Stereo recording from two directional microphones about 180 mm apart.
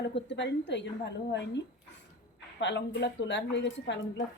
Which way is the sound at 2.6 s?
75° left (ahead or behind).